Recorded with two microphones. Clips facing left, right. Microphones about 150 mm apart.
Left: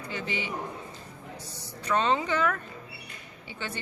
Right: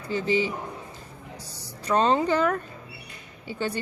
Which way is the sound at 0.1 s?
35° right (ahead or behind).